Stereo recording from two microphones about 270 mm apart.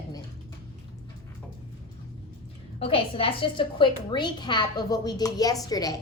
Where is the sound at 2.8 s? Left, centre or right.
Left.